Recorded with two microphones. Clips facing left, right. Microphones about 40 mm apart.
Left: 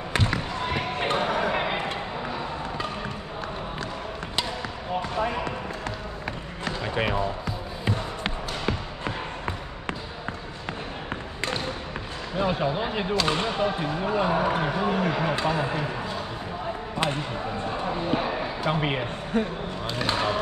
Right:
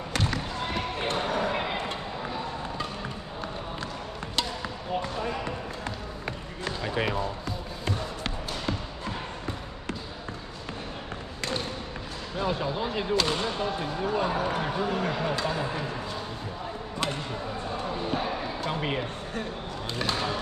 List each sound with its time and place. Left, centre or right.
0.1 s basketball bounce: left
6.8 s basketball bounce: centre
9.0 s basketball bounce: left
12.4 s speech: left
18.1 s basketball bounce: left
20.1 s speech: left